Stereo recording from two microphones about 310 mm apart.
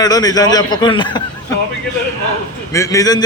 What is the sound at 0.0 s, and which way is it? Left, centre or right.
A man's voice, centre.